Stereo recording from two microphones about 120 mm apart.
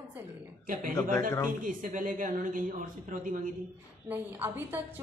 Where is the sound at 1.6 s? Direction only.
90° right.